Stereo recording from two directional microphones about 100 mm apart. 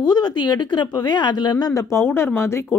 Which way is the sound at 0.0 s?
45° left (ahead or behind).